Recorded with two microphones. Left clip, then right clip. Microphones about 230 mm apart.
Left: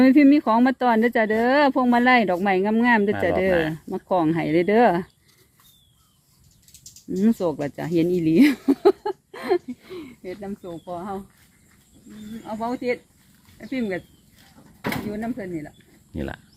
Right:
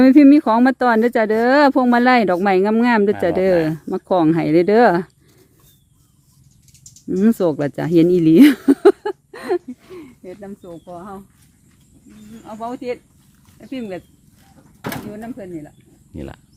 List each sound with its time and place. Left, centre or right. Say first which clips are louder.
0.0 s speech: right 5 dB; right
7.2 s speech: right 6 dB; right
10.3 s speech: even; centre
15.1 s speech: left 1 dB; centre